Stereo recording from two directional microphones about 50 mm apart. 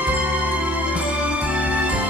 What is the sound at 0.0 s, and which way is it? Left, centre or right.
Music, right.